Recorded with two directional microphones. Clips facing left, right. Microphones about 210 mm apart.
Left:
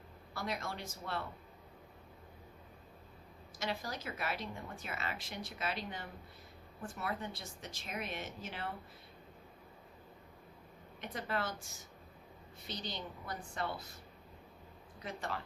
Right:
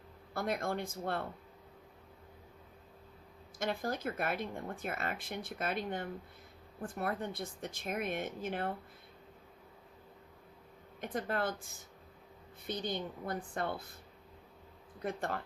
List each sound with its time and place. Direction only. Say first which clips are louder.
0.3 s speech: right 6 dB; 55° right (ahead or behind)
3.6 s speech: right 5 dB; 55° right (ahead or behind)
11.0 s speech: right 4 dB; 50° right (ahead or behind)
14.9 s speech: right 5 dB; 55° right (ahead or behind)